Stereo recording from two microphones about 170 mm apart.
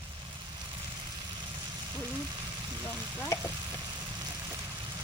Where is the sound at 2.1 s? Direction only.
20° right (ahead or behind).